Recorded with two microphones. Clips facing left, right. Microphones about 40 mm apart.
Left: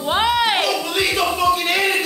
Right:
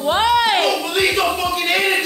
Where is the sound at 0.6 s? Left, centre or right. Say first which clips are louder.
Right 2 dB; centre.